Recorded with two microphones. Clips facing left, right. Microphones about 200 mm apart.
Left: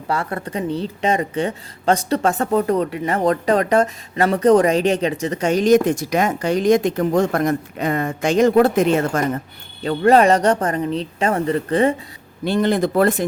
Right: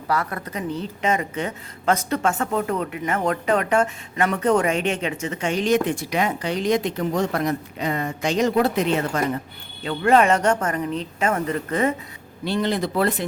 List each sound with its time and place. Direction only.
0.1 s speech: 30° left (ahead or behind)
12.5 s speech: 50° left (ahead or behind)